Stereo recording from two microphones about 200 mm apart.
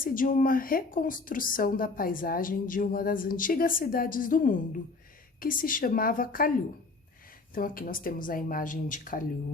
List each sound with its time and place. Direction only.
0.0 s speech: 45° left (ahead or behind)